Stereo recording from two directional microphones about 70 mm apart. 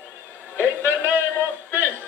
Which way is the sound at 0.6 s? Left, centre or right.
Left.